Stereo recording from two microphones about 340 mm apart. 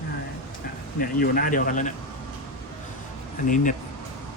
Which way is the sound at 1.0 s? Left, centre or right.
Left.